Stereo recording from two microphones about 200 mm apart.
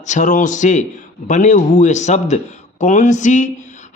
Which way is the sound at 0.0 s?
40° left (ahead or behind).